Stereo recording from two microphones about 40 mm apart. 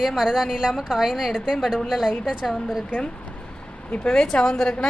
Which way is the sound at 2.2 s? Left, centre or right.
Centre.